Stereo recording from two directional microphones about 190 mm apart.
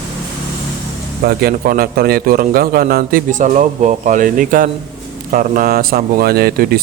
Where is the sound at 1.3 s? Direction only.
55° right (ahead or behind).